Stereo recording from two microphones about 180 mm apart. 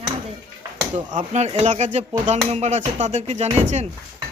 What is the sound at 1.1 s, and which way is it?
Speech, 40° right (ahead or behind).